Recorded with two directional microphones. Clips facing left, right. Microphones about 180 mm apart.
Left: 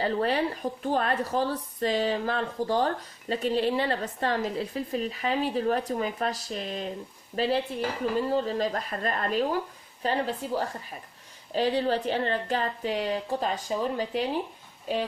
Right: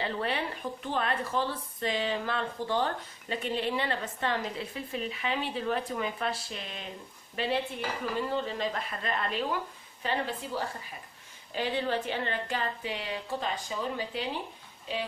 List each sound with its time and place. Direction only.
0.0 s speech: 40° left (ahead or behind)